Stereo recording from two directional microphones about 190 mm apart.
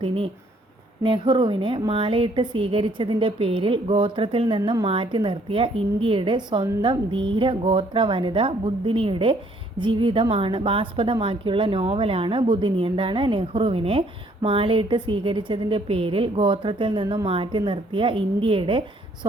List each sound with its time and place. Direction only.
1.0 s a woman's voice: 25° right (ahead or behind)